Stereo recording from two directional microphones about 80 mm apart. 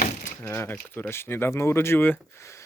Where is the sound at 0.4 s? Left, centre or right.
Left.